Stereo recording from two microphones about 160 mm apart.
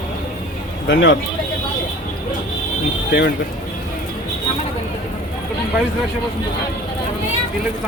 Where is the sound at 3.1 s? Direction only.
90° left.